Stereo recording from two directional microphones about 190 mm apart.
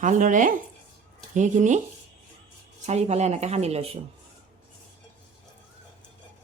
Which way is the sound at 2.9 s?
35° right (ahead or behind).